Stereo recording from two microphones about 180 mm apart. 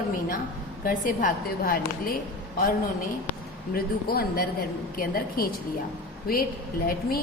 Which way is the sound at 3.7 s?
55° left (ahead or behind).